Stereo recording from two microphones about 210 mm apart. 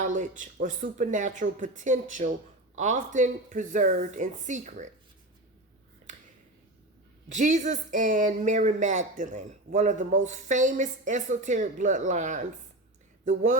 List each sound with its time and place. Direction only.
0.0 s speech: 35° right (ahead or behind)
7.3 s speech: 35° right (ahead or behind)